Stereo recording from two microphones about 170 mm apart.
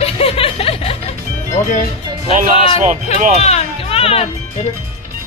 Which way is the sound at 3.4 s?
35° left (ahead or behind).